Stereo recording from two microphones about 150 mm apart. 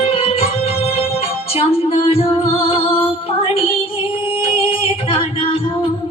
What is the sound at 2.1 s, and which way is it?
Music, 40° left (ahead or behind).